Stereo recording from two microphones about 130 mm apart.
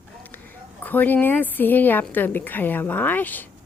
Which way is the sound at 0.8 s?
15° left (ahead or behind).